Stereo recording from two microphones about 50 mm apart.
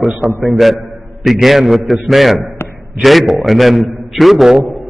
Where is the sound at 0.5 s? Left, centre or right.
Centre.